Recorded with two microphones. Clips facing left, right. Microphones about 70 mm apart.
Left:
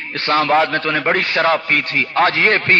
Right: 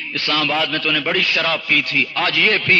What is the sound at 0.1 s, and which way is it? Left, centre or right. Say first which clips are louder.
A man's voice: left 6 dB; left.